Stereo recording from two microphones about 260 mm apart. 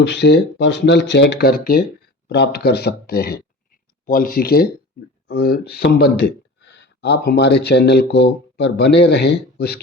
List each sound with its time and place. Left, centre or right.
0.0 s speech: left